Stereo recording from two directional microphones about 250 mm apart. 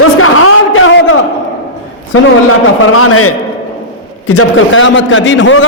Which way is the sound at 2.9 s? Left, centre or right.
Left.